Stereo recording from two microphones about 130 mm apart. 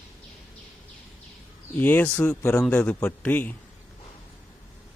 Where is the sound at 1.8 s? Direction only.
15° left (ahead or behind).